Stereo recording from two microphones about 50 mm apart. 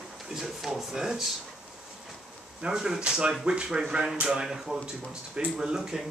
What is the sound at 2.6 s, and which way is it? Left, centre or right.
Speech, centre.